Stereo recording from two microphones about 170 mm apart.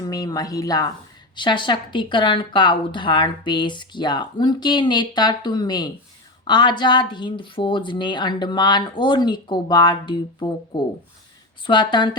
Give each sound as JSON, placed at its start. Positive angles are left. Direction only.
{"t": 0.0, "sound": "speech", "side_deg": 20}
{"t": 11.6, "sound": "speech", "side_deg": 25}